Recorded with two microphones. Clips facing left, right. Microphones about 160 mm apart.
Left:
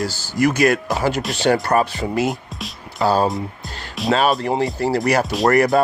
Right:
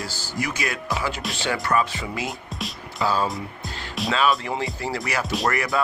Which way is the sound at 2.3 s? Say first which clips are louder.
Left 6 dB; centre (ahead or behind).